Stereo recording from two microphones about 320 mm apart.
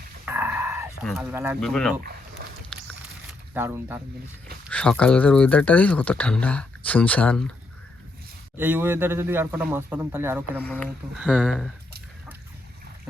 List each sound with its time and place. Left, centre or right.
0.3 s a sound: centre
2.4 s dog: right
3.5 s a man's voice: centre
4.7 s speech: centre
8.5 s a man's voice: centre
10.6 s speech: centre